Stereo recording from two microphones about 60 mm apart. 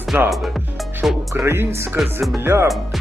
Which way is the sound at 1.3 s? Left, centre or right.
Right.